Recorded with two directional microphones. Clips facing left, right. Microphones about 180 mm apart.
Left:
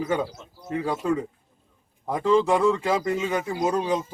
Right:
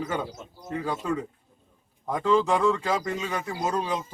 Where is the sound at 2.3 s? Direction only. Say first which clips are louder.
Left 3 dB; 10° left (ahead or behind).